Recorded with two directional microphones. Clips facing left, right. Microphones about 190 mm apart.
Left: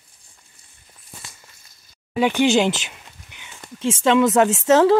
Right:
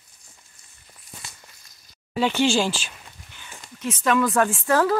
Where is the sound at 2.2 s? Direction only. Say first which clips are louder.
Left 4 dB; 15° left (ahead or behind).